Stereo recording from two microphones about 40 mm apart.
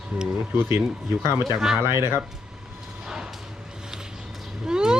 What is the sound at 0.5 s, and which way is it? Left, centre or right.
Speech, right.